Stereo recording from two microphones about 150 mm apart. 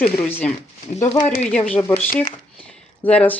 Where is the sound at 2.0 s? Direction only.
70° left (ahead or behind).